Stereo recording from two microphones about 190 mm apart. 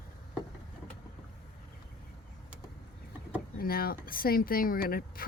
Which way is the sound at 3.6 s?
50° left (ahead or behind).